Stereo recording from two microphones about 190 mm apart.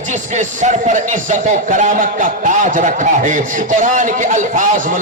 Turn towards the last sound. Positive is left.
turn(degrees=-40)  # may be behind; listen again after turning